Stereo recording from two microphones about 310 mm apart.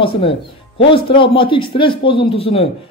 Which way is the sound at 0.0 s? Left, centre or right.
Centre.